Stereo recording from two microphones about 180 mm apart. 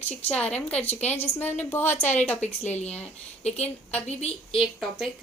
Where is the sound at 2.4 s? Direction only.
40° left (ahead or behind).